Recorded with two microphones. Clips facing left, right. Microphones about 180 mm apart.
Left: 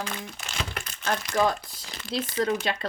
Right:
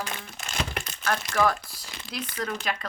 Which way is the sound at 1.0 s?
20° left (ahead or behind).